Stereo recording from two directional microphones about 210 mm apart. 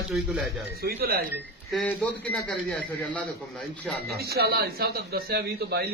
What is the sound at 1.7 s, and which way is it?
A man's voice, 5° left (ahead or behind).